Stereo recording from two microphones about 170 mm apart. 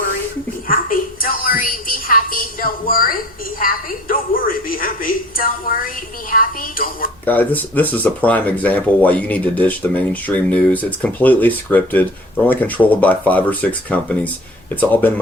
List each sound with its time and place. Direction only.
0.7 s a sound: 55° left (ahead or behind)
3.6 s a woman's voice: 55° left (ahead or behind)
7.3 s speech: 10° left (ahead or behind)